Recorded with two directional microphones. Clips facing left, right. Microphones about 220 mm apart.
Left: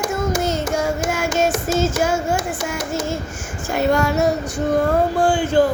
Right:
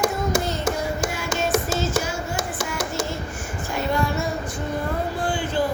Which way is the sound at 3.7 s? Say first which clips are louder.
Left 6 dB; 75° left (ahead or behind).